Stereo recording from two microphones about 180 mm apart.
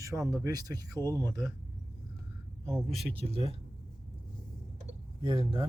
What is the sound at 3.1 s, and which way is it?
Speech, 30° right (ahead or behind).